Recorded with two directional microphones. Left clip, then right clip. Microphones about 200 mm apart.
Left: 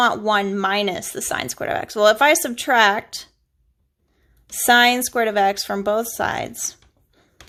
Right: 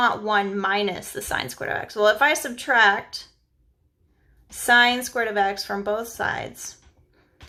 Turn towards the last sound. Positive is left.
turn(degrees=35)  # may be behind; listen again after turning